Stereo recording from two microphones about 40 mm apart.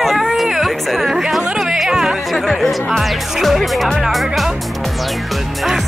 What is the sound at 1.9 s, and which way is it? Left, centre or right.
Music, centre.